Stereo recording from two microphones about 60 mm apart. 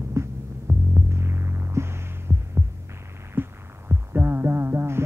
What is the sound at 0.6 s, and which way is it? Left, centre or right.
Throbbing, right.